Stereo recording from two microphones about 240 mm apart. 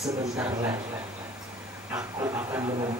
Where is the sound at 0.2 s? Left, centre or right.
Centre.